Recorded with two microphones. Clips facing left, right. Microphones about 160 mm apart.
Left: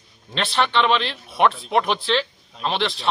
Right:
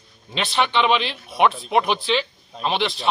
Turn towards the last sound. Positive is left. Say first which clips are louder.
# right 1 dB
turn(degrees=-5)  # may be behind; listen again after turning